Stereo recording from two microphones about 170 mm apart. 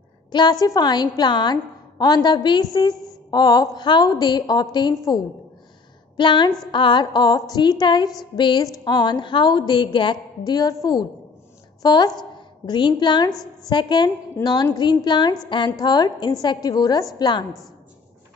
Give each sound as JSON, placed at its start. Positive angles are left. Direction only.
{"t": 0.3, "sound": "a woman's voice", "side_deg": 25}